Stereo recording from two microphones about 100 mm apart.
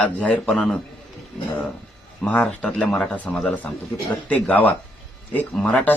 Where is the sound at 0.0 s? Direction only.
10° left (ahead or behind).